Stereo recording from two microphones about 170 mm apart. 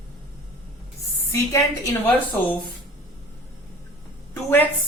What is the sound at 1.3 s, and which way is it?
A woman's voice, 15° left (ahead or behind).